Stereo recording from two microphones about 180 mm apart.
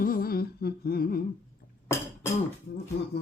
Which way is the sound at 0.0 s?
55° left (ahead or behind).